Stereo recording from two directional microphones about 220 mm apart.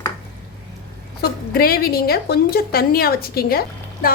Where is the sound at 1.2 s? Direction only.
45° left (ahead or behind).